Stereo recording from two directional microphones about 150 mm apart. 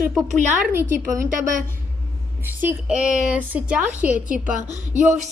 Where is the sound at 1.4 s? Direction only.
60° right (ahead or behind).